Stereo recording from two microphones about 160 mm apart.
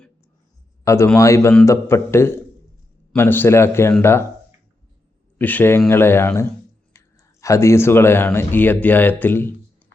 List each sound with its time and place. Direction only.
0.9 s a man's voice: 15° left (ahead or behind)
5.4 s speech: 10° left (ahead or behind)
6.9 s clicking: 15° left (ahead or behind)
7.4 s speech: 20° left (ahead or behind)